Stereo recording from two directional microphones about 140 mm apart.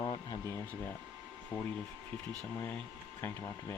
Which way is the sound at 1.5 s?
15° left (ahead or behind).